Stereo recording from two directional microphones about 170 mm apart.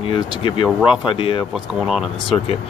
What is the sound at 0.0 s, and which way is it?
Speech, 30° left (ahead or behind).